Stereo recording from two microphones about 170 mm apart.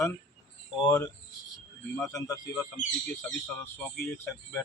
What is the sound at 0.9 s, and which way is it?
Speech, 15° left (ahead or behind).